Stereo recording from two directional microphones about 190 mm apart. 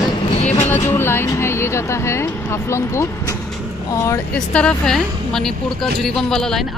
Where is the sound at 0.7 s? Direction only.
10° left (ahead or behind).